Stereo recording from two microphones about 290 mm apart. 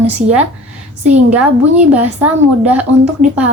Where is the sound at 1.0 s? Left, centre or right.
Centre.